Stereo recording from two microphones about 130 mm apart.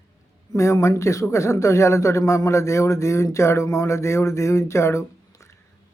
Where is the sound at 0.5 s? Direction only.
25° left (ahead or behind).